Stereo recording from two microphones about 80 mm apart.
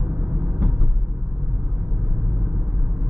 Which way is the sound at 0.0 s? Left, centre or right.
Centre.